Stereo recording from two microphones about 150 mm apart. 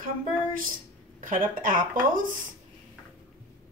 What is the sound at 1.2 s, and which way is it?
Speech, 65° right (ahead or behind).